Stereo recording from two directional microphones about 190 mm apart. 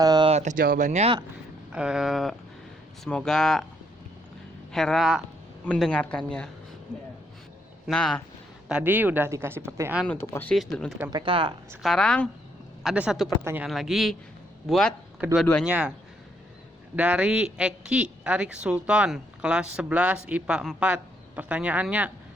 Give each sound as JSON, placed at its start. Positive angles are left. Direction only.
{"t": 0.0, "sound": "a sound", "side_deg": -20}
{"t": 0.3, "sound": "speech", "side_deg": -40}
{"t": 1.7, "sound": "a woman's voice", "side_deg": -5}
{"t": 4.7, "sound": "a woman's voice", "side_deg": 0}
{"t": 7.9, "sound": "a woman's voice", "side_deg": 5}
{"t": 8.7, "sound": "speech", "side_deg": -10}
{"t": 10.1, "sound": "a woman's voice", "side_deg": 10}
{"t": 11.1, "sound": "speech", "side_deg": -25}
{"t": 11.8, "sound": "a woman's voice", "side_deg": 5}
{"t": 13.4, "sound": "speech", "side_deg": -10}
{"t": 13.7, "sound": "a woman's voice", "side_deg": 0}
{"t": 15.2, "sound": "a woman's voice", "side_deg": -10}
{"t": 16.9, "sound": "a woman's voice", "side_deg": -5}